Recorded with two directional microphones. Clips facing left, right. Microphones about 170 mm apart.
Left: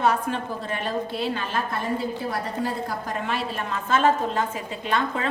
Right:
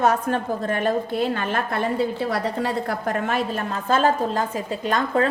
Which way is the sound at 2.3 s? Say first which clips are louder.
Right 4 dB; 70° right (ahead or behind).